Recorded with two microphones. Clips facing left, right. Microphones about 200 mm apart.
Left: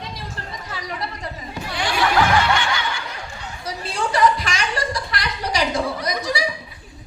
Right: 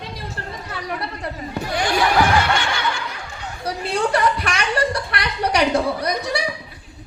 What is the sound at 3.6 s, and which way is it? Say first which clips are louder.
Chuckle: right 4 dB; 60° right (ahead or behind).